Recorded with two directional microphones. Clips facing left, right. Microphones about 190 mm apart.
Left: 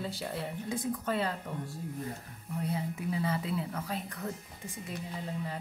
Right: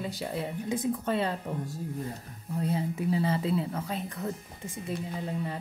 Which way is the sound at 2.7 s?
25° right (ahead or behind).